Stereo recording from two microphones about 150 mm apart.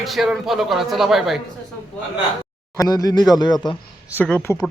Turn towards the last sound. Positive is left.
turn(degrees=10)  # may be behind; listen again after turning